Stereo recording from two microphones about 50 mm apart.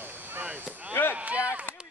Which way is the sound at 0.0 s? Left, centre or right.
Right.